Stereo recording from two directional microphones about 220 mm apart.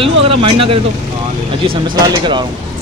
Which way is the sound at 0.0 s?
25° right (ahead or behind).